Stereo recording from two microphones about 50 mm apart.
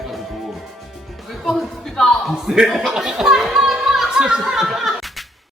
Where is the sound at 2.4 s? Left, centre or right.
Centre.